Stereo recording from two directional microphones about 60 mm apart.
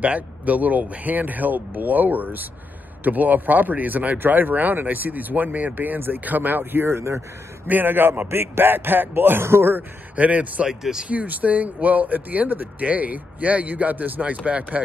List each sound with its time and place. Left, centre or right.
0.0 s speech: right
7.6 s speech: right
10.1 s speech: right
10.7 s speech: centre
11.1 s speech: right